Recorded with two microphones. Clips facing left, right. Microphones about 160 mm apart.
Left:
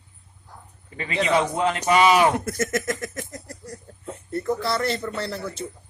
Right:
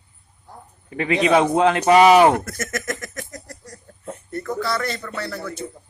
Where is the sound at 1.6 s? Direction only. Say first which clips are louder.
Right 6 dB; 70° right (ahead or behind).